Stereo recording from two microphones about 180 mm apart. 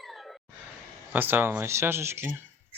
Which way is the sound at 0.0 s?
Centre (ahead or behind).